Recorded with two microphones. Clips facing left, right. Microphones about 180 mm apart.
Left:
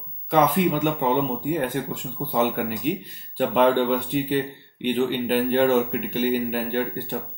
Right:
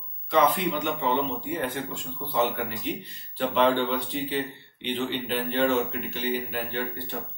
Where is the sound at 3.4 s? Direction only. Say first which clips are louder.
Left 4 dB; 50° left (ahead or behind).